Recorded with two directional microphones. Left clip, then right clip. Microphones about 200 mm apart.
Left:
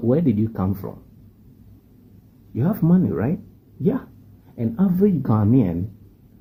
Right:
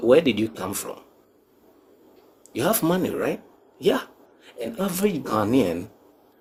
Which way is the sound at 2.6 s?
20° right (ahead or behind).